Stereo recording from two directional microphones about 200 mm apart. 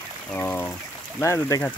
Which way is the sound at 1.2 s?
15° left (ahead or behind).